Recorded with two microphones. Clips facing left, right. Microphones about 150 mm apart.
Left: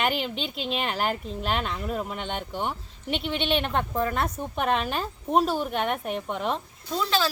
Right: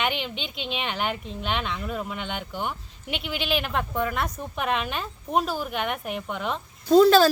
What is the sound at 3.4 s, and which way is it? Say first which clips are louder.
A woman's voice: even; 30° left (ahead or behind).